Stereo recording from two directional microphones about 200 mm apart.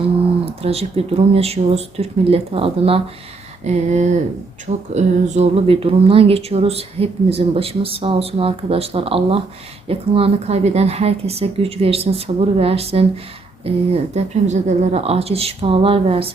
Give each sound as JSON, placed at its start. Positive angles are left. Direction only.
{"t": 0.4, "sound": "speech", "side_deg": -30}